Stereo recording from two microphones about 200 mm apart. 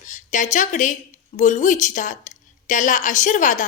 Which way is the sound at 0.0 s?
40° left (ahead or behind).